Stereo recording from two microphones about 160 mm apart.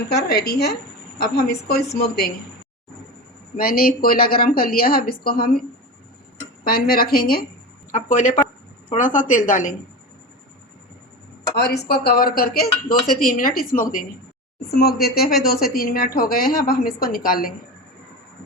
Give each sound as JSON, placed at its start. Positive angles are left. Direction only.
{"t": 0.1, "sound": "a woman's voice", "side_deg": 90}
{"t": 1.2, "sound": "a woman's voice", "side_deg": 70}
{"t": 3.6, "sound": "a woman's voice", "side_deg": 65}
{"t": 6.7, "sound": "a woman's voice", "side_deg": 70}
{"t": 7.9, "sound": "a woman's voice", "side_deg": 55}
{"t": 11.5, "sound": "a woman's voice", "side_deg": 90}
{"t": 14.7, "sound": "a woman's voice", "side_deg": 75}